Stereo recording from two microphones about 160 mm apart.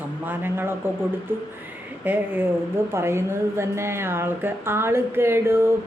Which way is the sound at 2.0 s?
10° right (ahead or behind).